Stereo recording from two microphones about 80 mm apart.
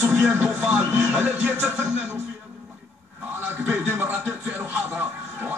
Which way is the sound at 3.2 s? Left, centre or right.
Right.